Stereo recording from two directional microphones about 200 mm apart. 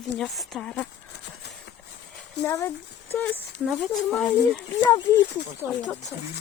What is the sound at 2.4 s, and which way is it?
Speech, 10° left (ahead or behind).